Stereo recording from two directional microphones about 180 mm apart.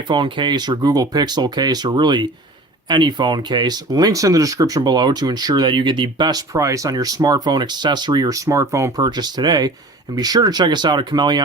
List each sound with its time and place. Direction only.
0.1 s speech: 25° right (ahead or behind)